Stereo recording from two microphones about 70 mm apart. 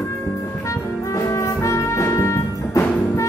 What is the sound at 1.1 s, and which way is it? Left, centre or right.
Brass instrument, left.